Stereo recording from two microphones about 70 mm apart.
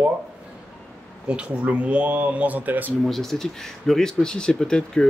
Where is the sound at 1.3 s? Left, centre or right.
Centre.